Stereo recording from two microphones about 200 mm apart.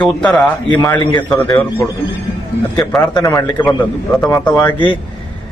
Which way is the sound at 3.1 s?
20° left (ahead or behind).